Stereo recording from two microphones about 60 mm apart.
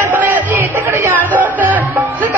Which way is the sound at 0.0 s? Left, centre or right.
Right.